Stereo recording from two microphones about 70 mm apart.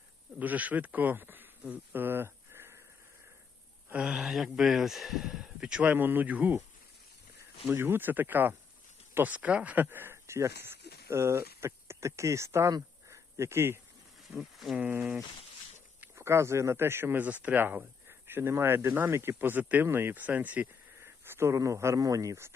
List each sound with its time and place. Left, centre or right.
0.3 s speech: right
3.9 s speech: centre
5.9 s speech: right
7.7 s speech: right
13.1 s a sound: right
14.3 s speech: centre
14.8 s speech: right
16.1 s speech: right
21.2 s speech: right